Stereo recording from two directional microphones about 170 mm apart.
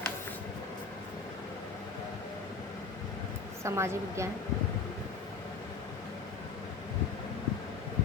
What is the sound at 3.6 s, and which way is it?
Speech, 15° right (ahead or behind).